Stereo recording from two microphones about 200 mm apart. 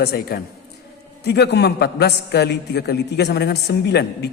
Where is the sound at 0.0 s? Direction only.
50° left (ahead or behind).